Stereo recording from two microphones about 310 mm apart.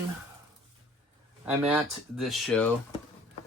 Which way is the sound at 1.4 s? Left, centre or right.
Centre.